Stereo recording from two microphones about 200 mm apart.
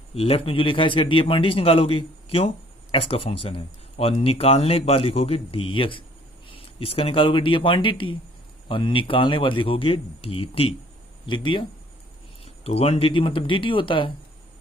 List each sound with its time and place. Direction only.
0.2 s speech: 30° left (ahead or behind)
12.6 s speech: 30° left (ahead or behind)